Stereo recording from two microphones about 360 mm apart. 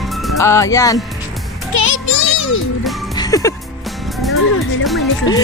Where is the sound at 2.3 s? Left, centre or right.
Left.